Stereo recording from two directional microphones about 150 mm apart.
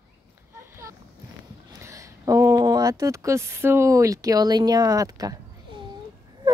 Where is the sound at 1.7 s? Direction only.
20° right (ahead or behind).